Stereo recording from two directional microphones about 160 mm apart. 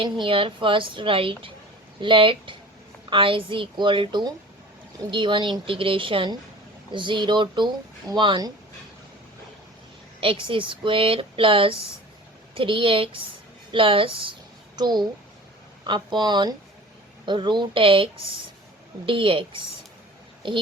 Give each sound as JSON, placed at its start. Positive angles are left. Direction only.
{"t": 0.0, "sound": "a woman's voice", "side_deg": -35}
{"t": 10.2, "sound": "a woman's voice", "side_deg": -35}